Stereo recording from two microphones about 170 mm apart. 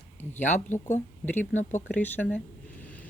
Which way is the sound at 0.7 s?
45° left (ahead or behind).